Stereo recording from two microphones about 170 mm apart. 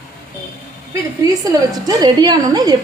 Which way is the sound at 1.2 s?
20° right (ahead or behind).